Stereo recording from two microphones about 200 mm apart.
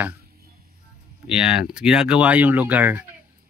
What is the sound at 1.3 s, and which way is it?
Speech, 5° right (ahead or behind).